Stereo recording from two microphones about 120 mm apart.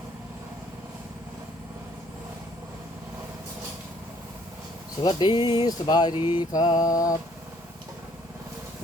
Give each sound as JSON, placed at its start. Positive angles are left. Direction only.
{"t": 5.0, "sound": "speech", "side_deg": 40}